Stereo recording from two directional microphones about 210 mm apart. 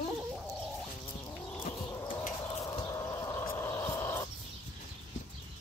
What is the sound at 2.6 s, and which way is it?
Chicken, 15° left (ahead or behind).